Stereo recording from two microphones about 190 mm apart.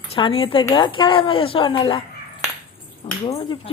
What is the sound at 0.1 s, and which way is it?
Speech, 30° left (ahead or behind).